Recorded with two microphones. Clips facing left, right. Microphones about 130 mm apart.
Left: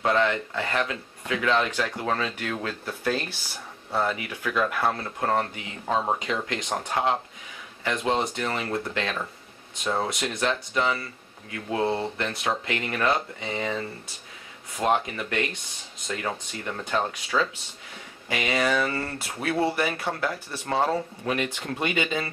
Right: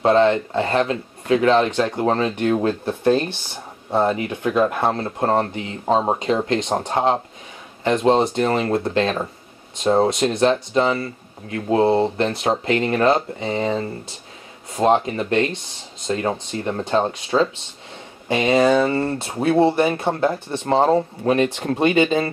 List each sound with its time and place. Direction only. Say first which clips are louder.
0.0 s speech: right 8 dB; 30° right (ahead or behind)